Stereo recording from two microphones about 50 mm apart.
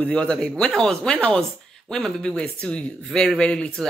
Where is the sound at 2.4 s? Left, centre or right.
Left.